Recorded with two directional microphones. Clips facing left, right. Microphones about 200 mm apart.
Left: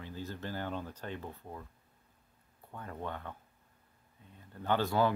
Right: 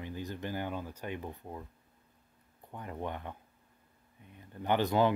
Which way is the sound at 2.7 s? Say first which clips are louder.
Right 2 dB; 15° right (ahead or behind).